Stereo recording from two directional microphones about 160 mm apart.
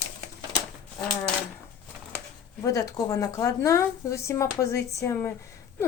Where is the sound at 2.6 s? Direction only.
20° left (ahead or behind).